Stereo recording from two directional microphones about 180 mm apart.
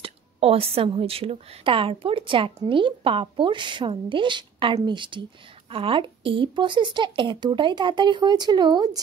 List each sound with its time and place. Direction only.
0.0 s a woman's voice: 30° right (ahead or behind)